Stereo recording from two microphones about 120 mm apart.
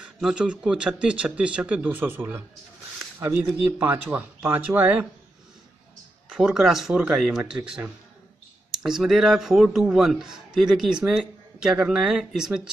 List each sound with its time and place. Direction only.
0.0 s speech: 5° right (ahead or behind)
6.2 s a man's voice: 5° right (ahead or behind)